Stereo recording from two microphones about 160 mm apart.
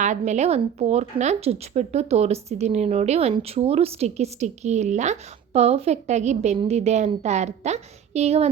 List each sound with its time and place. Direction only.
0.0 s a woman's voice: 50° right (ahead or behind)